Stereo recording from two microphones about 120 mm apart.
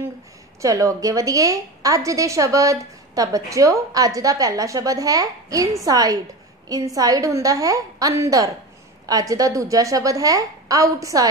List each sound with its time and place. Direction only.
0.6 s a woman's voice: 25° right (ahead or behind)